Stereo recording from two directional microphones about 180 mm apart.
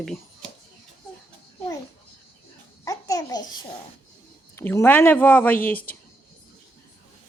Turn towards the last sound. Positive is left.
turn(degrees=10)  # may be behind; listen again after turning